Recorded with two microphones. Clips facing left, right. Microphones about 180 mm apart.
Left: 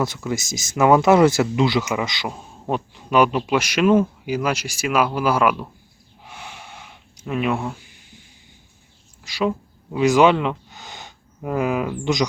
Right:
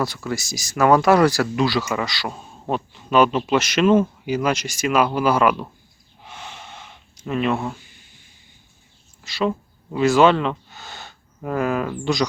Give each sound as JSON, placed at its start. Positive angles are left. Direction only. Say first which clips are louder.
{"t": 0.0, "sound": "speech", "louder": "left 1 dB", "side_deg": 20}
{"t": 6.2, "sound": "gasp", "louder": "right 1 dB", "side_deg": 10}
{"t": 9.2, "sound": "speech", "louder": "even", "side_deg": 10}